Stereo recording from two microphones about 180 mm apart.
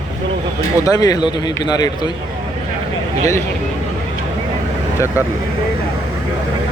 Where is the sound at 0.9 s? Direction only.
20° left (ahead or behind).